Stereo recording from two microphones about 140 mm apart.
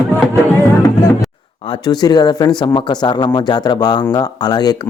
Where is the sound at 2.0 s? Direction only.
30° left (ahead or behind).